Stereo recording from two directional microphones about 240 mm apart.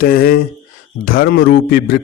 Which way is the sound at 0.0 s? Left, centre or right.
Left.